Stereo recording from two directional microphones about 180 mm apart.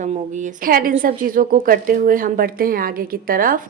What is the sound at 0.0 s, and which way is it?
Speech, 45° right (ahead or behind).